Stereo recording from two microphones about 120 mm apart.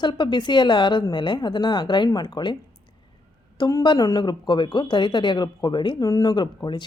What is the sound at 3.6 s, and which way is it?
Speech, 35° left (ahead or behind).